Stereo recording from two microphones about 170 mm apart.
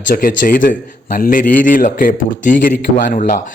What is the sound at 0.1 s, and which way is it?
A man's voice, 55° left (ahead or behind).